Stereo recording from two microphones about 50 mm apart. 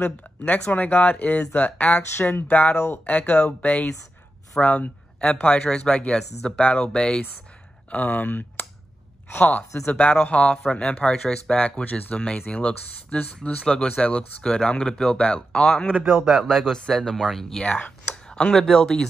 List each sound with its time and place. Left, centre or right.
0.5 s speech: left; by 7.2 s centre
7.9 s speech: left
9.4 s speech: left
11.6 s speech: left
16.1 s speech: centre
17.6 s speech: left
18.2 s a sound: centre
18.6 s speech: centre